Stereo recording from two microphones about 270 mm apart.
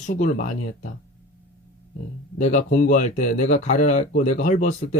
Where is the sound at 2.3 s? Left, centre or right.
Left.